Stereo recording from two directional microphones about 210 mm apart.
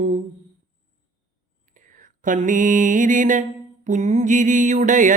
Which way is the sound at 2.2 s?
40° right (ahead or behind).